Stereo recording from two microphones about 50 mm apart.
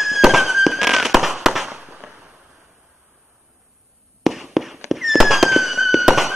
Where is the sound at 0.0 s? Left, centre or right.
Centre.